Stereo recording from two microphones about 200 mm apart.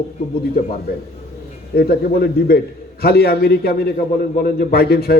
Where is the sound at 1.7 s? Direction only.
50° left (ahead or behind).